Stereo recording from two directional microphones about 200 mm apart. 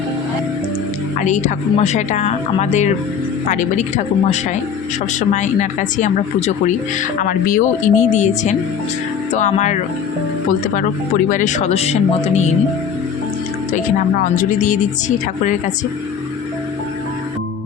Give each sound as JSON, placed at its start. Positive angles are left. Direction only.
{"t": 1.2, "sound": "speech", "side_deg": 40}
{"t": 13.7, "sound": "speech", "side_deg": 40}